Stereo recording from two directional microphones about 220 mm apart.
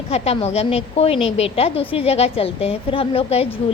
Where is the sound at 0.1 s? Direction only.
30° left (ahead or behind).